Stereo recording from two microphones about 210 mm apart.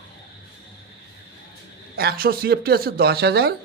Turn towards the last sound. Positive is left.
turn(degrees=-50)  # may be behind; listen again after turning